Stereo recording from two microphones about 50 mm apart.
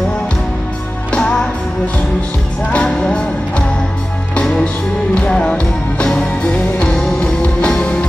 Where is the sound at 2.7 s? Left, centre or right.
Centre.